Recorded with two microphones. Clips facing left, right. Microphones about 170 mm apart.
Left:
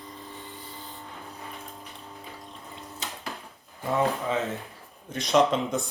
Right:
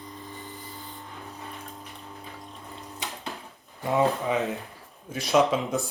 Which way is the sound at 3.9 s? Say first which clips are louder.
Right 2 dB; 15° right (ahead or behind).